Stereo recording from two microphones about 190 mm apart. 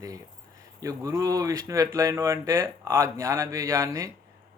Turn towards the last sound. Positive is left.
turn(degrees=-15)  # may be behind; listen again after turning